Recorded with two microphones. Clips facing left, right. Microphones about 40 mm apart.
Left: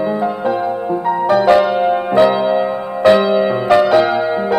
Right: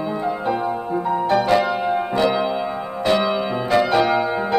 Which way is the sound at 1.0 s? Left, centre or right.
Left.